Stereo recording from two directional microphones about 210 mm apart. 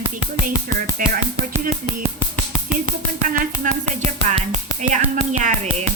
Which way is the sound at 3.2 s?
40° right (ahead or behind).